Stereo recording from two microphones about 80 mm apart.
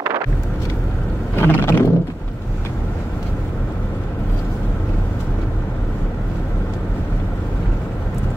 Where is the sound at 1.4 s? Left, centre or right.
Left.